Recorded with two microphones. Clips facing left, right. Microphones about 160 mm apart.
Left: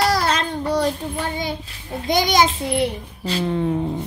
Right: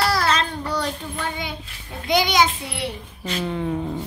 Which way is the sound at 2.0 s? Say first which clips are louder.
Left 1 dB; 45° left (ahead or behind).